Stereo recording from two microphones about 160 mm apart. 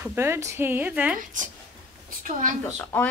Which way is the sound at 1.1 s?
55° right (ahead or behind).